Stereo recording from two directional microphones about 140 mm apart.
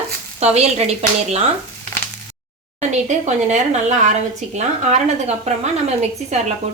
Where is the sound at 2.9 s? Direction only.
55° right (ahead or behind).